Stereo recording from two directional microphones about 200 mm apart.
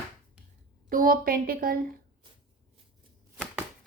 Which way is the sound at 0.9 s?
45° right (ahead or behind).